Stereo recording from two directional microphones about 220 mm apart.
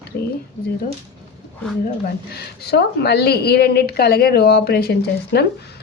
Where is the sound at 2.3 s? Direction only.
45° left (ahead or behind).